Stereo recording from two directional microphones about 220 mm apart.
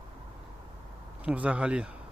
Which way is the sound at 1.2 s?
5° right (ahead or behind).